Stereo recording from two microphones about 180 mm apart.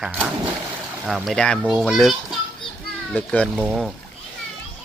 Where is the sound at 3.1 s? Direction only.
5° left (ahead or behind).